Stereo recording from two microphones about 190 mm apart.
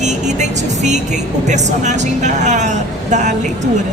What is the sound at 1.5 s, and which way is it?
Speech, 40° right (ahead or behind).